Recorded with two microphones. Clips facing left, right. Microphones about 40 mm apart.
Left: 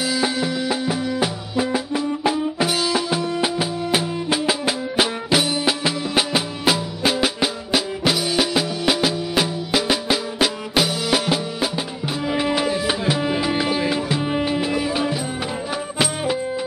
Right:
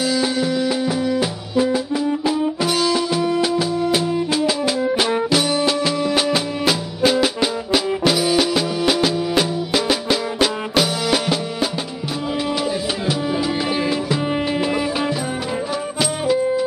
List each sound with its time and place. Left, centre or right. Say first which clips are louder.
0.0 s music: right 2 dB; centre
1.6 s music: right 3 dB; centre
12.4 s music: left 2 dB; left
14.5 s music: right 1 dB; centre
16.0 s music: right 3 dB; left